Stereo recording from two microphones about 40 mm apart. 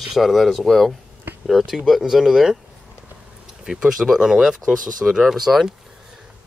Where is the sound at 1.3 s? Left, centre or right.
Right.